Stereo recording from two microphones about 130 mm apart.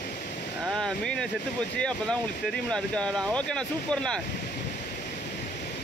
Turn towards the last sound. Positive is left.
turn(degrees=5)  # may be behind; listen again after turning